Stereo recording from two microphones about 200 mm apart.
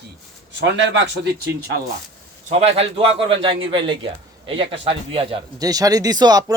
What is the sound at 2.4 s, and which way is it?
A man's voice, 30° right (ahead or behind).